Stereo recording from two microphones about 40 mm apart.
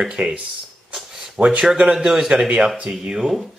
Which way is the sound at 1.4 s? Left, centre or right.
Right.